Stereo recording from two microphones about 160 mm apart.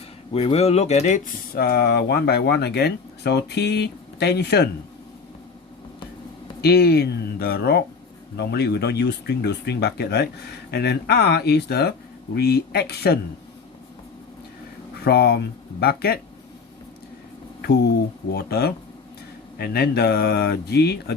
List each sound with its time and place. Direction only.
0.3 s speech: 40° left (ahead or behind)
1.5 s speech: 70° left (ahead or behind); by 4.7 s 90° left
6.6 s speech: 85° left
15.0 s speech: 85° left
15.8 s speech: 75° left (ahead or behind)
18.3 s speech: 80° left